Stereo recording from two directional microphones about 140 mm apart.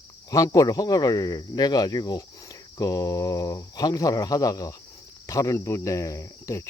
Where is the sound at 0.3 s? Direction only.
25° left (ahead or behind).